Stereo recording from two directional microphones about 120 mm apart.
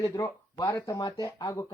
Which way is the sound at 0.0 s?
30° left (ahead or behind).